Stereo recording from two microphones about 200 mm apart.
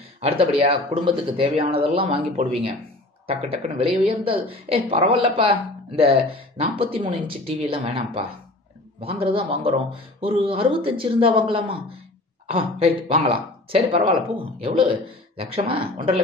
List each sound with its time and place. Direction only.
0.2 s speech: 30° right (ahead or behind)